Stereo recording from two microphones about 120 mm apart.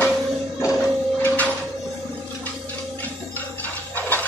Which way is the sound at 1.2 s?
15° left (ahead or behind).